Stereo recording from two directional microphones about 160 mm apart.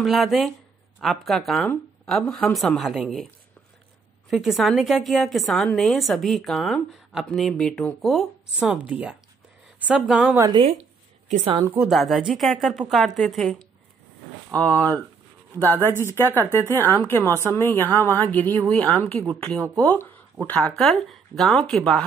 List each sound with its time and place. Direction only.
0.0 s a woman's voice: centre (ahead or behind)
4.3 s a woman's voice: centre (ahead or behind)
10.5 s speech: 35° right (ahead or behind)
11.8 s a woman's voice: centre (ahead or behind)
15.5 s speech: 20° right (ahead or behind)
16.0 s a woman's voice: 15° left (ahead or behind)